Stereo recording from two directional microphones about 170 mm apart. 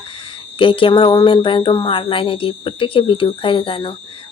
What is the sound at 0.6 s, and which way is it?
Speech, 30° left (ahead or behind).